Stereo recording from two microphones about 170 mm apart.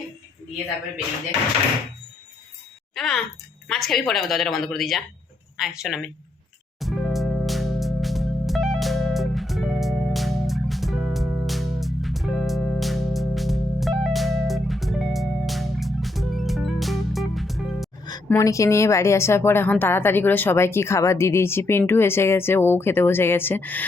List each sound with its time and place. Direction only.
2.9 s a sound: centre (ahead or behind)
3.7 s a woman's voice: centre (ahead or behind)
6.7 s music: centre (ahead or behind)
18.3 s a woman's voice: 20° left (ahead or behind)